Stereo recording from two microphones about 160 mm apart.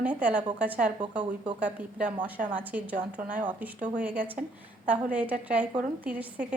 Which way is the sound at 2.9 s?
55° right (ahead or behind).